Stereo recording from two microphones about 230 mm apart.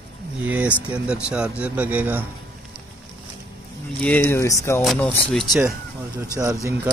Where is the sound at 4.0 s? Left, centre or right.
Centre.